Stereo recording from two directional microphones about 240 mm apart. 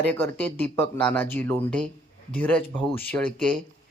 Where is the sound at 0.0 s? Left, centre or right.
Centre.